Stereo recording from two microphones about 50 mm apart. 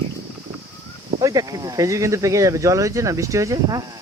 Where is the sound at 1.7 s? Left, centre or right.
Right.